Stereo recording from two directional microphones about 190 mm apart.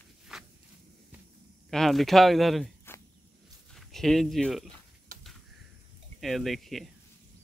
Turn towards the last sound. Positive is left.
turn(degrees=0)  # may be behind; listen again after turning